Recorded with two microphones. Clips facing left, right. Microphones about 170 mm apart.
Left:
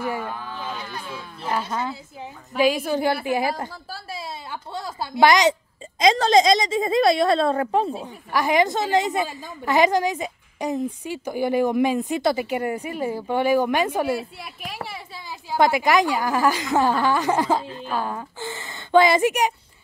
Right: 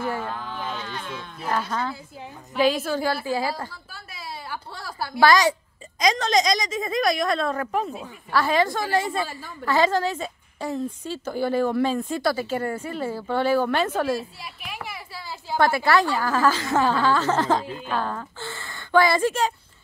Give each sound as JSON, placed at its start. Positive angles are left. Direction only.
{"t": 0.0, "sound": "a sound", "side_deg": 10}
{"t": 1.5, "sound": "a woman's voice", "side_deg": 10}
{"t": 3.7, "sound": "a woman's voice", "side_deg": 30}
{"t": 8.3, "sound": "a woman's voice", "side_deg": 15}
{"t": 14.4, "sound": "a sound", "side_deg": 40}
{"t": 15.2, "sound": "a woman's voice", "side_deg": 15}